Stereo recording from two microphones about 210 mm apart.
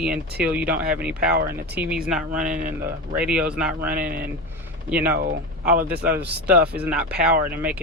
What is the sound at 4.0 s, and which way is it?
Speech, 45° right (ahead or behind).